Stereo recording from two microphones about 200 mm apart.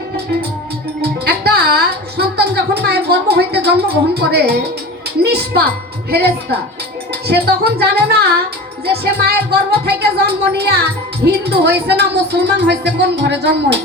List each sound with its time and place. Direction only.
1.0 s music: 55° right (ahead or behind)
5.2 s speech: 55° right (ahead or behind)